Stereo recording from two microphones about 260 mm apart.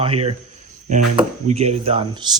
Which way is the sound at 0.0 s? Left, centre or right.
Right.